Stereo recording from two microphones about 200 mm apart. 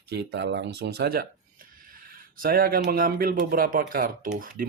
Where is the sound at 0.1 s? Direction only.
60° right (ahead or behind).